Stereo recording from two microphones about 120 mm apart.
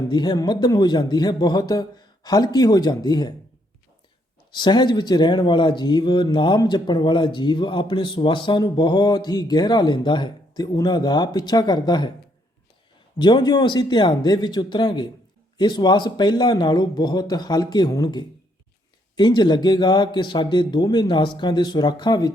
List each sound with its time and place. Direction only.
0.1 s speech: 35° left (ahead or behind)
4.5 s speech: 40° left (ahead or behind)
13.1 s speech: 40° left (ahead or behind)